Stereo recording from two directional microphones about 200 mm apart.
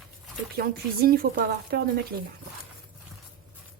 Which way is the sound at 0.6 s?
50° right (ahead or behind).